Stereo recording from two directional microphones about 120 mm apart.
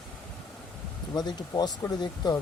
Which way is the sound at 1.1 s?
35° left (ahead or behind).